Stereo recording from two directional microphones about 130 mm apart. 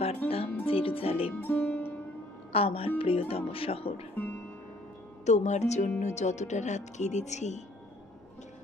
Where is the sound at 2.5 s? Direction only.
50° left (ahead or behind).